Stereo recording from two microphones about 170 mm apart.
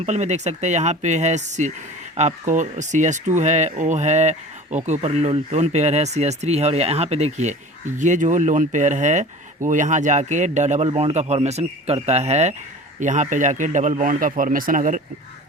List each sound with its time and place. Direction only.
0.0 s speech: 40° right (ahead or behind)